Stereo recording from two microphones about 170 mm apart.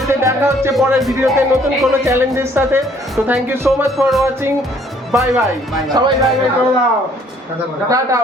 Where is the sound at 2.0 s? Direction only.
15° right (ahead or behind).